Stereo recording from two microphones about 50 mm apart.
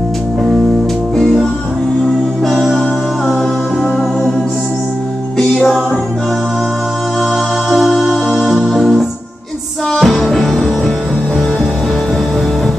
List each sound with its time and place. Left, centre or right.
1.1 s music: centre
2.4 s music: centre
7.7 s music: centre
8.1 s music: centre
8.5 s music: centre